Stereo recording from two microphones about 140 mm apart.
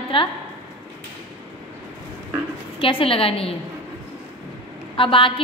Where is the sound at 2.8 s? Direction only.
40° left (ahead or behind).